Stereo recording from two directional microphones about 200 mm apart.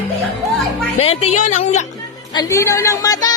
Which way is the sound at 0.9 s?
30° left (ahead or behind).